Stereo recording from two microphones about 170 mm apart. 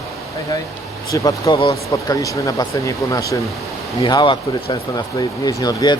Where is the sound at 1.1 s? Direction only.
20° left (ahead or behind).